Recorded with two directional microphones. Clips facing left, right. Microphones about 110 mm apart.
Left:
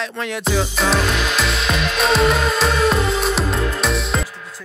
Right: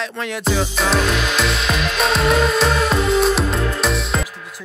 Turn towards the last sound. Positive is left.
turn(degrees=0)  # may be behind; listen again after turning